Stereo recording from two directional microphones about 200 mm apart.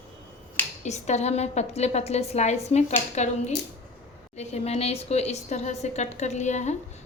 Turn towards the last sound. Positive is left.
turn(degrees=35)  # may be behind; listen again after turning